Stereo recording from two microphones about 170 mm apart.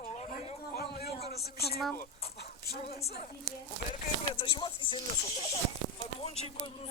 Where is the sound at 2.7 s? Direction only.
65° left (ahead or behind).